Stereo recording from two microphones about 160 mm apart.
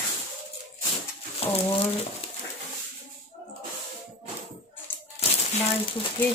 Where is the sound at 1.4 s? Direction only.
40° left (ahead or behind).